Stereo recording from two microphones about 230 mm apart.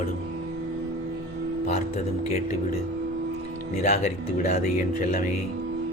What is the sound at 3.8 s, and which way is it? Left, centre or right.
Speech, left.